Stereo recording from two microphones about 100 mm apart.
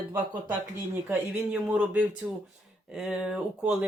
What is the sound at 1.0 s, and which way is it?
Speech, 10° right (ahead or behind).